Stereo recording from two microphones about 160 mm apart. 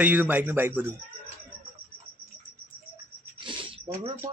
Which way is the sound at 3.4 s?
30° right (ahead or behind).